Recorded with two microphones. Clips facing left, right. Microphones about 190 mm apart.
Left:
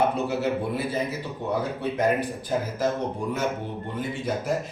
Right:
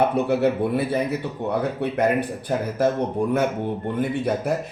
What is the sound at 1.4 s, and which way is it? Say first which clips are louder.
Speech: right 2 dB; 65° right (ahead or behind).